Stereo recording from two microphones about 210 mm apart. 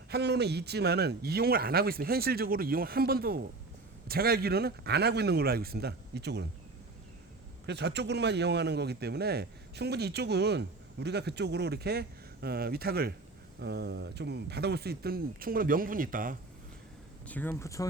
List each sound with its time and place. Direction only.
0.1 s speech: 50° right (ahead or behind)
7.7 s speech: 55° right (ahead or behind)
17.2 s speech: 10° left (ahead or behind)